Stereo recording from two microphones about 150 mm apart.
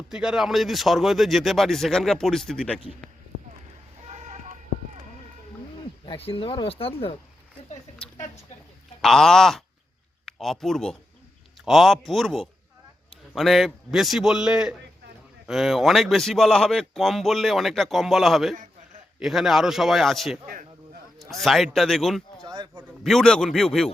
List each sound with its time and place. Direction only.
0.1 s speech: 5° right (ahead or behind)
4.0 s a sound: 50° right (ahead or behind)
6.1 s speech: 40° left (ahead or behind)
9.0 s speech: 5° left (ahead or behind)
21.4 s speech: centre (ahead or behind)
22.4 s a sound: 25° right (ahead or behind)
23.0 s speech: 5° left (ahead or behind)